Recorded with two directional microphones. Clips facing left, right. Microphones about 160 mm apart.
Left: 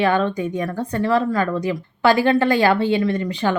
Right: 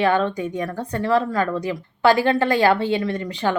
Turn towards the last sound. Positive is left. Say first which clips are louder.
# left 3 dB
turn(degrees=-35)  # may be behind; listen again after turning